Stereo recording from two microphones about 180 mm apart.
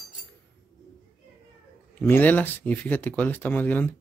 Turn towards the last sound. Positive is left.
turn(degrees=10)  # may be behind; listen again after turning